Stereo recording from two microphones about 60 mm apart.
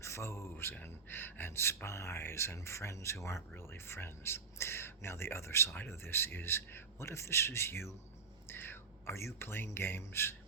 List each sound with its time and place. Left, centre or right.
0.0 s speech: left
0.5 s speech: left